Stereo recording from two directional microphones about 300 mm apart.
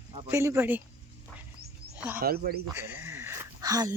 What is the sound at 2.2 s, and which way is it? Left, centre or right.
Speech, right.